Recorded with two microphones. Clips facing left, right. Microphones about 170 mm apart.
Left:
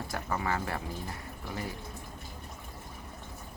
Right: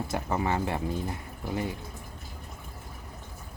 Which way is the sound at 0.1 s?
25° right (ahead or behind).